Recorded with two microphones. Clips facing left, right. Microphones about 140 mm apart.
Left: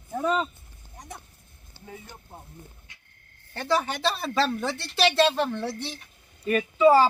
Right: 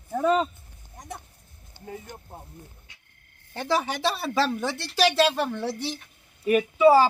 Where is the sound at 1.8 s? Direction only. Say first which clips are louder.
Right 4 dB; 15° right (ahead or behind).